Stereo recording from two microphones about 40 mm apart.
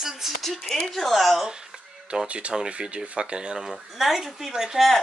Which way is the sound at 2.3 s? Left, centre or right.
Right.